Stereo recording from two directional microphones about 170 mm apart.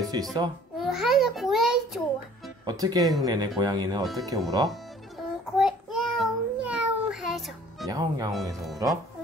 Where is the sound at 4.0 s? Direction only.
Centre (ahead or behind).